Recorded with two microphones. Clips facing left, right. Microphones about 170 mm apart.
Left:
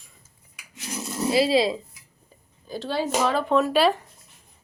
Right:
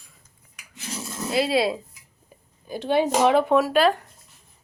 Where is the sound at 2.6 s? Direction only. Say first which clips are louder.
Right 5 dB; 15° right (ahead or behind).